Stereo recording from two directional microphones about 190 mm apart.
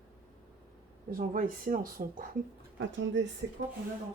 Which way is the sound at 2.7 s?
70° right (ahead or behind).